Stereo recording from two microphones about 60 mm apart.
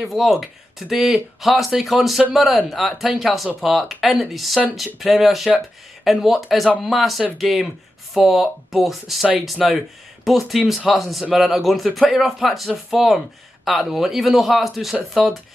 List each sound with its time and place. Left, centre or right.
0.0 s speech: centre